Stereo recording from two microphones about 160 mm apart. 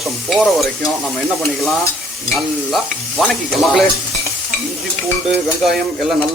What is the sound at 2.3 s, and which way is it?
Stir, centre (ahead or behind).